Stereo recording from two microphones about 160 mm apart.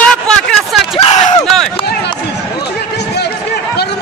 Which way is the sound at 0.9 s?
40° left (ahead or behind).